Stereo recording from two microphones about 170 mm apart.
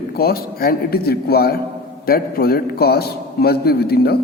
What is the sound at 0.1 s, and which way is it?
A man's voice, 65° left (ahead or behind).